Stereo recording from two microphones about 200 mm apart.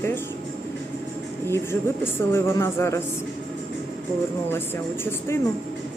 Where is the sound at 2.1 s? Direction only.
10° left (ahead or behind).